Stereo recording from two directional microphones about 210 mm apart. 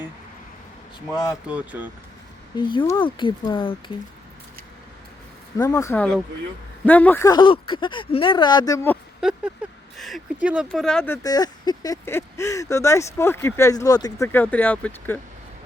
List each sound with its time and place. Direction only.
1.1 s speech: 20° left (ahead or behind)
1.5 s speech: 5° right (ahead or behind)
2.6 s speech: 20° left (ahead or behind)
5.5 s speech: 15° left (ahead or behind)
10.0 s speech: centre (ahead or behind)